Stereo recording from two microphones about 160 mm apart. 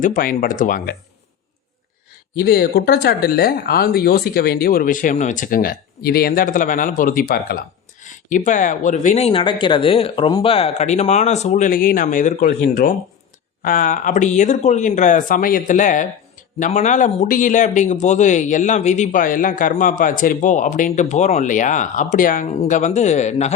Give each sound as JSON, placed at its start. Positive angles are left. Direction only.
{"t": 0.0, "sound": "speech", "side_deg": 55}
{"t": 2.4, "sound": "a man's voice", "side_deg": 70}